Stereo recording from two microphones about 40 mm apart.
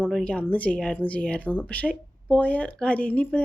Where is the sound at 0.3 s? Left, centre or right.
Left.